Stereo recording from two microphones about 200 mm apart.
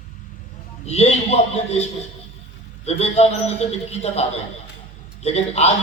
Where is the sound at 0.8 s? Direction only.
30° left (ahead or behind).